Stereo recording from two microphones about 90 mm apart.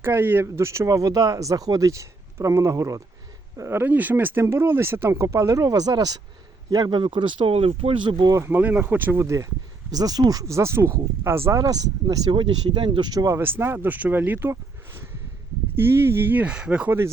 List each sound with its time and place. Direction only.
0.0 s speech: 25° right (ahead or behind)
3.6 s speech: 25° right (ahead or behind); by 8.4 s 50° right (ahead or behind)
8.4 s speech: 20° right (ahead or behind)
9.9 s speech: 45° right (ahead or behind)
12.4 s speech: 70° right (ahead or behind)
13.1 s speech: 40° right (ahead or behind)
13.4 s speech: 25° right (ahead or behind)